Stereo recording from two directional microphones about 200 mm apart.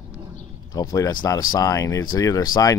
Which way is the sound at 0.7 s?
15° left (ahead or behind).